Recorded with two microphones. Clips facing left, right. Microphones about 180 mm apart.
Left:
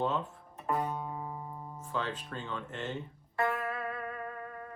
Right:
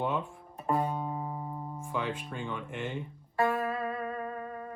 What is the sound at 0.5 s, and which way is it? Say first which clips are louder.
Music: right 3 dB; 30° right (ahead or behind).